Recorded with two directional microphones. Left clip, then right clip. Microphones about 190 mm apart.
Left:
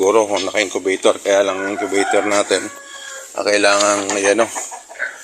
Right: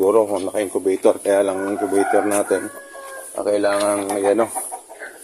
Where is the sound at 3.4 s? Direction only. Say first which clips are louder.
Left 4 dB; centre (ahead or behind).